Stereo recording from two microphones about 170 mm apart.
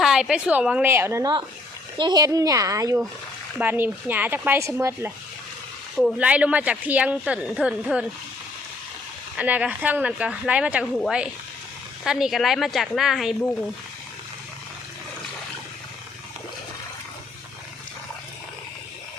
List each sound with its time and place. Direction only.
0.0 s speech: 5° right (ahead or behind)
6.0 s speech: 5° right (ahead or behind)
9.4 s speech: 10° right (ahead or behind)